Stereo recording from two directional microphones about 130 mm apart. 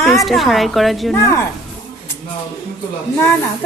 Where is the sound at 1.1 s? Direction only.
20° left (ahead or behind).